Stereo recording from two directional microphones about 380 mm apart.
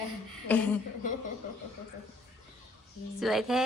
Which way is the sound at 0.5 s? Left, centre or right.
Centre.